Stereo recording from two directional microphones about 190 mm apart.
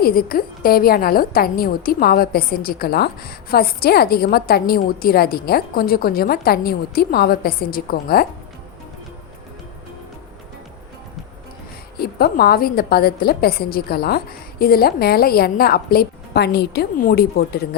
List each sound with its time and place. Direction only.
0.0 s a woman's voice: 50° left (ahead or behind)
11.9 s a woman's voice: 55° left (ahead or behind)